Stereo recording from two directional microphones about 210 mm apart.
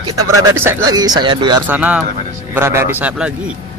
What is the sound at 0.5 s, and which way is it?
Speech, 15° right (ahead or behind).